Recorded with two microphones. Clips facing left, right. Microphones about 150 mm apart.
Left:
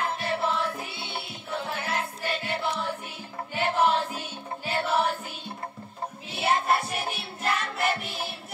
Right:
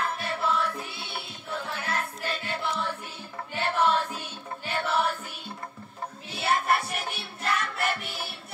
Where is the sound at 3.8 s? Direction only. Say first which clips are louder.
Left 1 dB; 30° left (ahead or behind).